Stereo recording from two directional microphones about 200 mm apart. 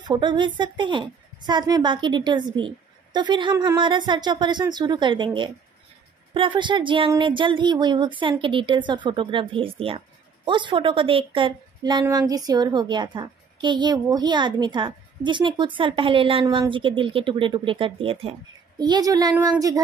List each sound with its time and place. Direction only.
0.0 s speech: 20° right (ahead or behind)